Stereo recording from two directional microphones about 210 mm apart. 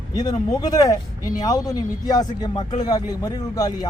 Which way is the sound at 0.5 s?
20° left (ahead or behind).